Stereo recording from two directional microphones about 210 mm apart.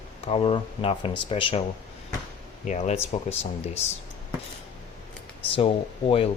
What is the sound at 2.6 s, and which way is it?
Speech, 35° left (ahead or behind).